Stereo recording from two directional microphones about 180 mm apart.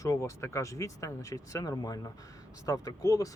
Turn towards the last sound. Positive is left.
turn(degrees=20)  # may be behind; listen again after turning